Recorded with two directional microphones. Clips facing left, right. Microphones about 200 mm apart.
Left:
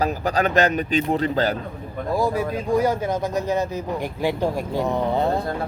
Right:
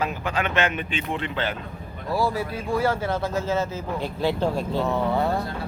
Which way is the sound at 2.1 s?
20° left (ahead or behind).